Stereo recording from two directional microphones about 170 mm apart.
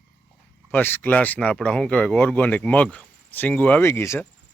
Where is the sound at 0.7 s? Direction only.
10° left (ahead or behind).